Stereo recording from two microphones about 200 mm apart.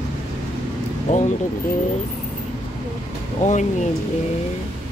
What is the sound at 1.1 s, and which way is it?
Speech, 40° left (ahead or behind).